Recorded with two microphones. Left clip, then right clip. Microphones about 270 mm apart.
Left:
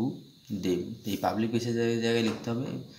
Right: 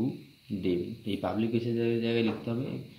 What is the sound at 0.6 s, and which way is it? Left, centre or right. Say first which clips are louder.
Speech: even; left.